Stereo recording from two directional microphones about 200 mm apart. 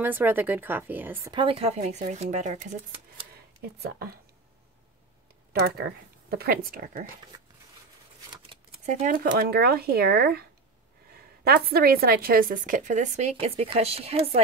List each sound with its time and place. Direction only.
0.0 s speech: 10° right (ahead or behind)
1.3 s speech: 25° right (ahead or behind)
3.6 s a woman's voice: 55° right (ahead or behind)
6.3 s a woman's voice: 50° right (ahead or behind)
8.8 s a woman's voice: 45° right (ahead or behind)
11.4 s a woman's voice: 50° right (ahead or behind); by 14.4 s 30° right (ahead or behind)